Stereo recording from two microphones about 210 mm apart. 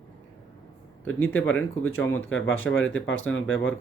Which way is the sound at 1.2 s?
75° left (ahead or behind).